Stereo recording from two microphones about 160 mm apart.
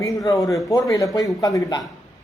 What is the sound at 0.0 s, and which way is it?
Speech, 20° left (ahead or behind).